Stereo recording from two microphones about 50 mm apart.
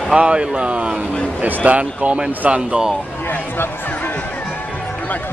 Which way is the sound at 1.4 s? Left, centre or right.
Right.